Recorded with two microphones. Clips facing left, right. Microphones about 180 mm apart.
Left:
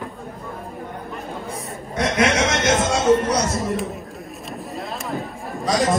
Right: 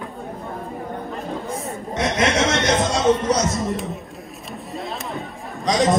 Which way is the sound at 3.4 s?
Centre (ahead or behind).